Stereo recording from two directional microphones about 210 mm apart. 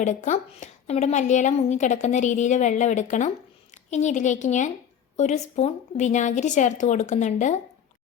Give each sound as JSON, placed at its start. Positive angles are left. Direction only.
{"t": 0.0, "sound": "a woman's voice", "side_deg": 35}